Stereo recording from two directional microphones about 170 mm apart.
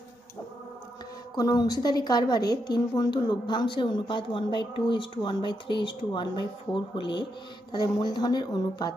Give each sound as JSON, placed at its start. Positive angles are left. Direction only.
{"t": 1.3, "sound": "a woman's voice", "side_deg": 20}